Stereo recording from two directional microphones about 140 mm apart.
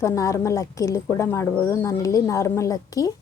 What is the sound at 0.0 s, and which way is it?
Speech, 20° left (ahead or behind).